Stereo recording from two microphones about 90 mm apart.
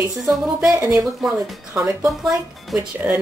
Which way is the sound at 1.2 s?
5° right (ahead or behind).